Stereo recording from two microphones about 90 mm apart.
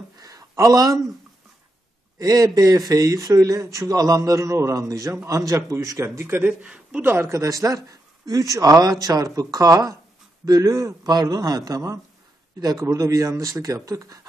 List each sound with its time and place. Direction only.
0.2 s a sound: 40° right (ahead or behind)
2.1 s speech: 40° right (ahead or behind)
6.4 s speech: 10° right (ahead or behind)
7.1 s speech: 30° right (ahead or behind)